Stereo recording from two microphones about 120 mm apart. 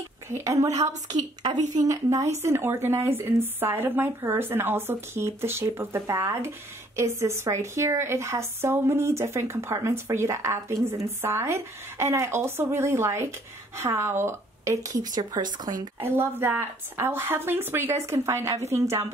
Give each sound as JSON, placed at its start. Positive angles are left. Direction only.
{"t": 0.3, "sound": "speech", "side_deg": -25}
{"t": 0.8, "sound": "a woman's voice", "side_deg": -75}
{"t": 1.6, "sound": "a woman's voice", "side_deg": -90}
{"t": 1.9, "sound": "speech", "side_deg": -25}
{"t": 16.0, "sound": "speech", "side_deg": -20}